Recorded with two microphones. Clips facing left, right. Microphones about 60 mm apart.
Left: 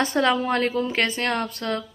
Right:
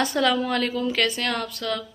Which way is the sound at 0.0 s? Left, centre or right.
Left.